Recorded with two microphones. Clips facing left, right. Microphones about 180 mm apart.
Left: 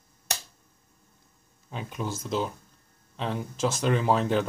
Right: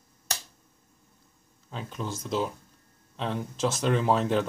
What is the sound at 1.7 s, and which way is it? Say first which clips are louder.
Speech: left 1 dB; 15° left (ahead or behind).